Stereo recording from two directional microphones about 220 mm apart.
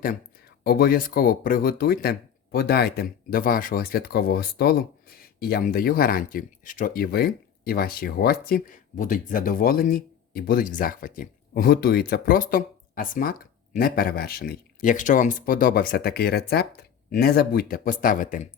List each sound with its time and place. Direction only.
0.6 s speech: 45° left (ahead or behind)